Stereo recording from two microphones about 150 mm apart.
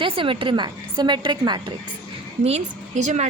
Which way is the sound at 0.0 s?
35° right (ahead or behind).